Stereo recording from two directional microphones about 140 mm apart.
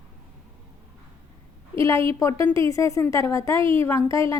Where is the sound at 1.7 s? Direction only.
20° left (ahead or behind).